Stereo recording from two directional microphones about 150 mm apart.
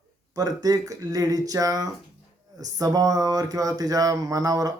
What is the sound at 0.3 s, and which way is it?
Speech, 25° right (ahead or behind).